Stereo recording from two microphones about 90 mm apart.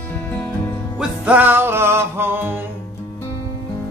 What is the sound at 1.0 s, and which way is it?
Music, 15° right (ahead or behind).